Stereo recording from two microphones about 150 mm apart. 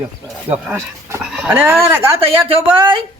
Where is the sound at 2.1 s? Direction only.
40° right (ahead or behind).